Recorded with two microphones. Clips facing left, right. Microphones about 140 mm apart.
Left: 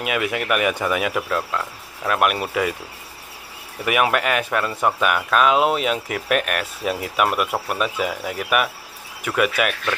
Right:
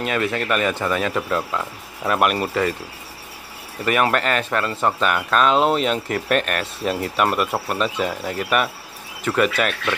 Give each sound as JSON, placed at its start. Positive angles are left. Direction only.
{"t": 0.0, "sound": "speech", "side_deg": 10}
{"t": 1.3, "sound": "cricket", "side_deg": -5}
{"t": 3.8, "sound": "speech", "side_deg": 10}